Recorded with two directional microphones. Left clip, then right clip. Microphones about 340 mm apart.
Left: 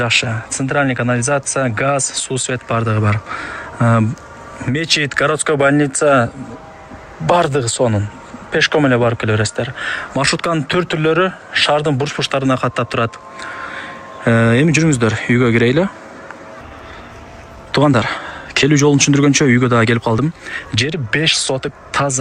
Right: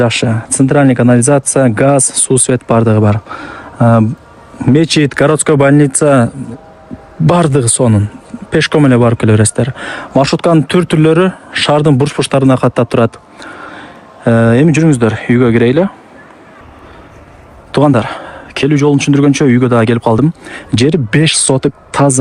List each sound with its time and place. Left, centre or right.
0.0 s speech: centre
7.3 s speech: centre
17.7 s speech: centre